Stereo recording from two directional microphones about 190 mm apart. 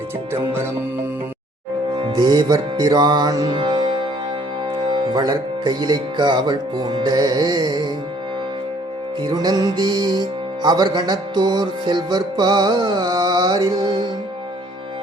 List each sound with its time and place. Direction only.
2.0 s music: 20° right (ahead or behind)
4.9 s music: 20° right (ahead or behind)
9.2 s music: 20° right (ahead or behind)